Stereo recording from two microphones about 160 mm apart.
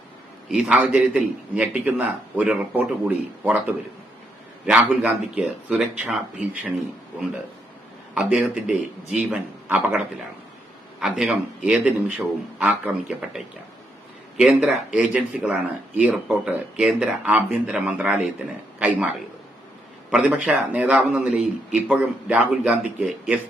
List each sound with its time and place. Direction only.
0.4 s speech: 5° right (ahead or behind)
4.6 s speech: 5° right (ahead or behind)
8.1 s speech: 5° right (ahead or behind)
11.0 s a man's voice: 5° right (ahead or behind)
20.1 s speech: 5° right (ahead or behind)